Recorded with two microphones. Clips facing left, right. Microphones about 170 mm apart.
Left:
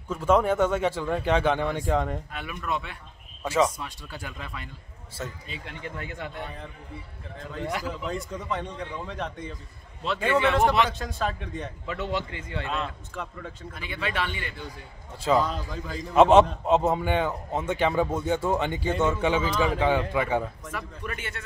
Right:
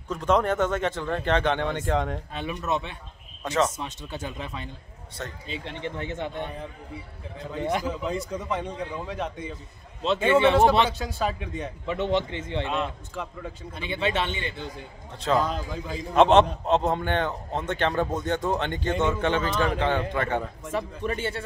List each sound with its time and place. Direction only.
0.1 s a man's voice: 5° left (ahead or behind)
2.3 s speech: 25° right (ahead or behind)
7.6 s speech: 20° right (ahead or behind)
8.1 s a man's voice: centre (ahead or behind)
10.0 s speech: 25° right (ahead or behind)
10.9 s a man's voice: 5° right (ahead or behind)
11.8 s speech: 20° right (ahead or behind)
13.1 s a man's voice: centre (ahead or behind)
13.7 s speech: 25° right (ahead or behind)
15.1 s a man's voice: 5° left (ahead or behind)
20.7 s speech: 30° right (ahead or behind)